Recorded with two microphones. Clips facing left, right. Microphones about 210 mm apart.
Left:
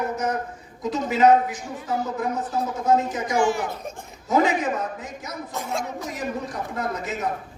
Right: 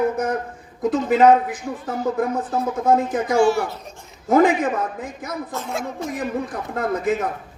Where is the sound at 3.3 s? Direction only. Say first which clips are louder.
Right 5 dB; 15° left (ahead or behind).